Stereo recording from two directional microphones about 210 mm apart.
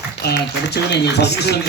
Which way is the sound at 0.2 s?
50° left (ahead or behind).